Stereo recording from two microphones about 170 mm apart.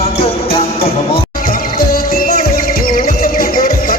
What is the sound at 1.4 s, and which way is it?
Music, 60° left (ahead or behind).